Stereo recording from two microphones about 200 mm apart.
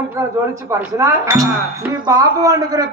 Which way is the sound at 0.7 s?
15° right (ahead or behind).